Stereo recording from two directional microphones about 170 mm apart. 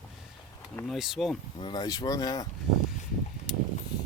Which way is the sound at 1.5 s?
25° left (ahead or behind).